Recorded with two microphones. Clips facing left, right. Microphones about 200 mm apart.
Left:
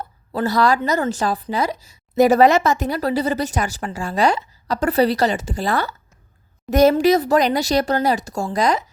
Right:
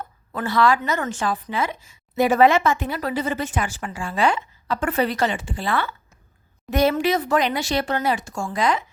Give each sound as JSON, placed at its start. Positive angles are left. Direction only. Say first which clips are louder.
{"t": 0.0, "sound": "speech", "louder": "left 6 dB", "side_deg": 35}